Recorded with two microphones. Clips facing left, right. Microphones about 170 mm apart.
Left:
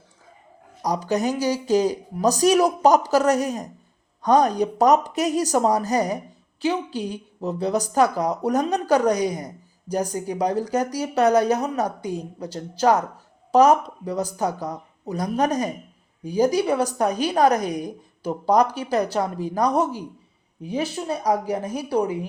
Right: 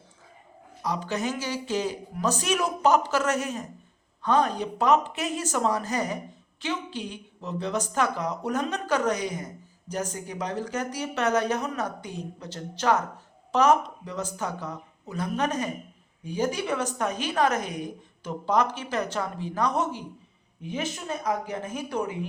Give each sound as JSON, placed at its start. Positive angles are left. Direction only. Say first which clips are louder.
{"t": 0.8, "sound": "a woman's voice", "louder": "left 6 dB", "side_deg": 40}